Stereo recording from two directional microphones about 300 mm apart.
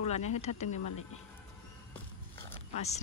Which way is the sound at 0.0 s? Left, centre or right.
Left.